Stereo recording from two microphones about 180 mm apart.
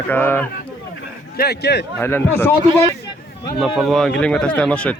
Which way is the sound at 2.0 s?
10° left (ahead or behind).